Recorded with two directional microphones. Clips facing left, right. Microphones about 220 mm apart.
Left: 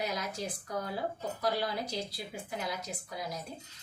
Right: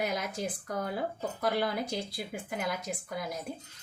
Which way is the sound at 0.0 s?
50° right (ahead or behind).